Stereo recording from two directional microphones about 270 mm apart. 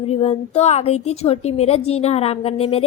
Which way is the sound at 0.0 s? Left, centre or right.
Left.